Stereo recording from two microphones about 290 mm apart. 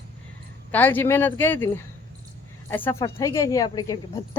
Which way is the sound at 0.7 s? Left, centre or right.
Centre.